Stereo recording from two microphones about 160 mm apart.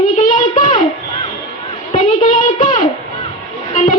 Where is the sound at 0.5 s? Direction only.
50° left (ahead or behind).